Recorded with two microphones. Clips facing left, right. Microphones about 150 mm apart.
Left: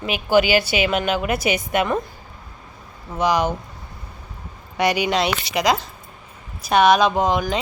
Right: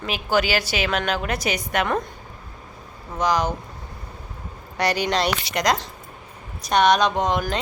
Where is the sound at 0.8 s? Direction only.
5° left (ahead or behind).